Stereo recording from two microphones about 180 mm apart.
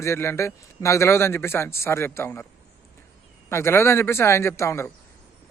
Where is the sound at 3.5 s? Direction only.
15° left (ahead or behind).